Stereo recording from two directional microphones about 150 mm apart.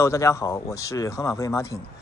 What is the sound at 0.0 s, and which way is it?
Speech, 20° left (ahead or behind).